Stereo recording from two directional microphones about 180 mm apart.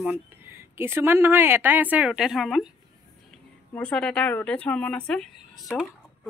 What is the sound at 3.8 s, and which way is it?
Speech, 5° left (ahead or behind).